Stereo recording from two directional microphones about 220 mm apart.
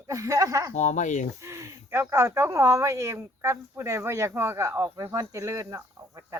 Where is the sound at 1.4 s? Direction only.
15° right (ahead or behind).